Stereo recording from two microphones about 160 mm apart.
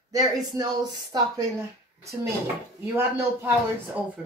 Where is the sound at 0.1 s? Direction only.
25° right (ahead or behind).